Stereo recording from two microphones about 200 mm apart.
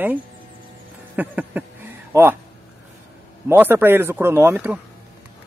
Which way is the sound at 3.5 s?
10° right (ahead or behind).